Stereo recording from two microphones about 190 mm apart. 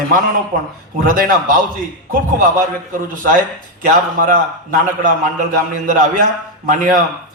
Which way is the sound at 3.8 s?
45° right (ahead or behind).